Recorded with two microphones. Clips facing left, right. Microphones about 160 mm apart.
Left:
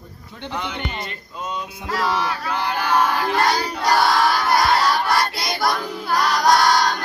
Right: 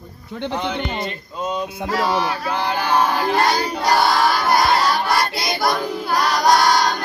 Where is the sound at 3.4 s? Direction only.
Centre (ahead or behind).